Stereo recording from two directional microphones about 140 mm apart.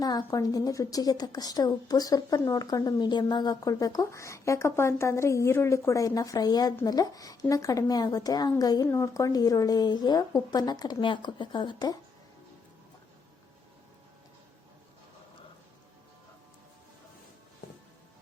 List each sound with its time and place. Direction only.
0.0 s a woman's voice: 30° left (ahead or behind)